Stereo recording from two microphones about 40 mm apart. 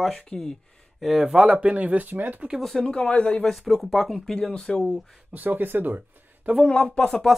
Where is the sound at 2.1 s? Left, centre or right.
Right.